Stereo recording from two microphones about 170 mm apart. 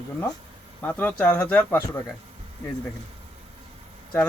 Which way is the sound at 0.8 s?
10° left (ahead or behind).